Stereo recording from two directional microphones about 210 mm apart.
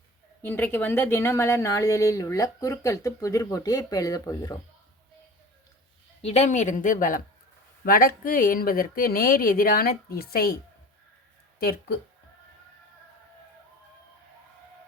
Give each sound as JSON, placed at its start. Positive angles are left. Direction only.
{"t": 0.4, "sound": "speech", "side_deg": 10}
{"t": 6.2, "sound": "speech", "side_deg": 30}